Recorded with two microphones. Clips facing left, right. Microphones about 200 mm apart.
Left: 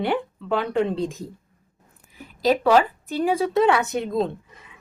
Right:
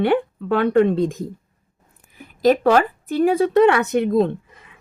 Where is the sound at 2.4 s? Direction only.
50° right (ahead or behind).